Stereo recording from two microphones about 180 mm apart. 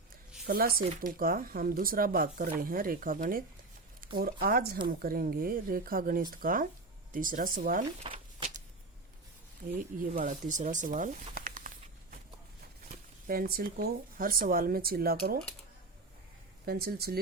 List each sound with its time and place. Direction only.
0.4 s speech: 55° right (ahead or behind)
8.0 s a sound: 30° right (ahead or behind)
10.0 s speech: 50° right (ahead or behind)
13.2 s speech: 55° right (ahead or behind)
16.6 s speech: 60° right (ahead or behind)